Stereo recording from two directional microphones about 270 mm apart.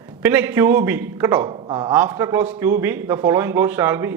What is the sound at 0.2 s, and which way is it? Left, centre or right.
Speech, centre.